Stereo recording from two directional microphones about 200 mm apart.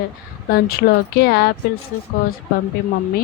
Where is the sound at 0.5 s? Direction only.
50° left (ahead or behind).